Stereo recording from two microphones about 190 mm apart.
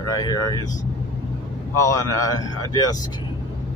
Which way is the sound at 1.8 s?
20° left (ahead or behind).